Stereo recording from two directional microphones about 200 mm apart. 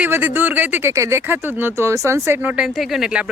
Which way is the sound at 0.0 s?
10° right (ahead or behind).